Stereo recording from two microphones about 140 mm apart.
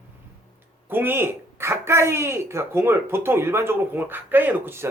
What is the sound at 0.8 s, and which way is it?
Speech, 15° right (ahead or behind).